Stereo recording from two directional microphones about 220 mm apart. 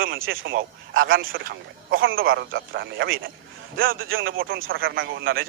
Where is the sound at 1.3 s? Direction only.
55° right (ahead or behind).